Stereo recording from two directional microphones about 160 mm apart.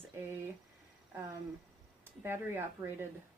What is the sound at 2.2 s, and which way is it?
Speech, 15° right (ahead or behind).